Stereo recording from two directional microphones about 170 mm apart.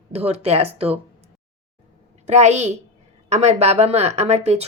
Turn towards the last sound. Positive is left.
turn(degrees=-40)  # may be behind; listen again after turning